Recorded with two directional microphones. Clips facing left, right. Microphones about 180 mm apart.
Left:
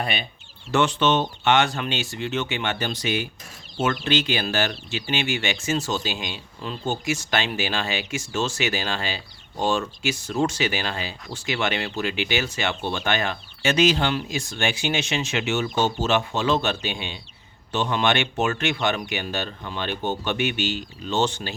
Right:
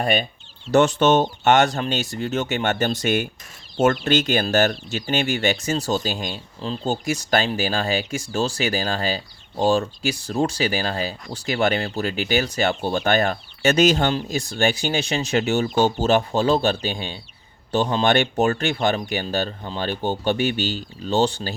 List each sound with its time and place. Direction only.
0.0 s speech: 45° right (ahead or behind)